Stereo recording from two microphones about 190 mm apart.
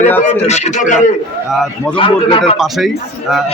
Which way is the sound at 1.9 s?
25° left (ahead or behind).